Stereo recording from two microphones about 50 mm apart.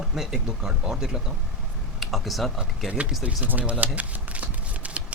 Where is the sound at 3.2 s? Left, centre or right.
Right.